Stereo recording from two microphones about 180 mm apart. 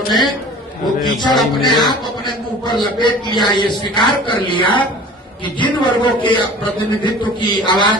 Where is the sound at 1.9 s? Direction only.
25° left (ahead or behind).